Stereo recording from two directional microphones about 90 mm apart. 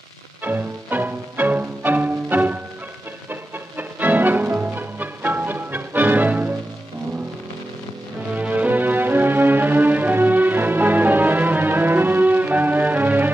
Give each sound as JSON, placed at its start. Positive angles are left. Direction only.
{"t": 0.4, "sound": "music", "side_deg": -20}
{"t": 8.4, "sound": "music", "side_deg": -15}